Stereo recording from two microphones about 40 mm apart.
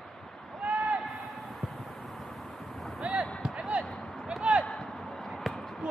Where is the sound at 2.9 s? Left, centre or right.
Right.